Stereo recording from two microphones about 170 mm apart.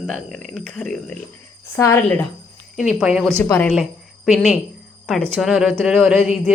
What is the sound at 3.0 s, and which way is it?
Speech, centre (ahead or behind).